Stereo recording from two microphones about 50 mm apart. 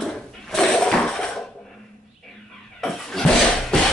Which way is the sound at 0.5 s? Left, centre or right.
Centre.